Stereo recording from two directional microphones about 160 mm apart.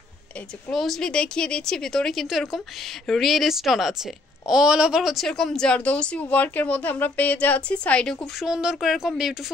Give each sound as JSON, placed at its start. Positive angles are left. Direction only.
{"t": 0.7, "sound": "a woman's voice", "side_deg": 5}